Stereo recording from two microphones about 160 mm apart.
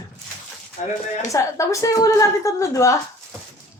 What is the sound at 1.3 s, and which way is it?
A woman's voice, 20° left (ahead or behind).